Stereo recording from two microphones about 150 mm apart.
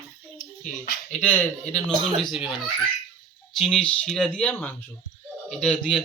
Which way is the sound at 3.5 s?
Centre (ahead or behind).